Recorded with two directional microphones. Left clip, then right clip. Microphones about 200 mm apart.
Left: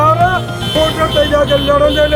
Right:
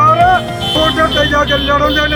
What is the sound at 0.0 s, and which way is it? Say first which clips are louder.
Music: right 2 dB; 15° left (ahead or behind).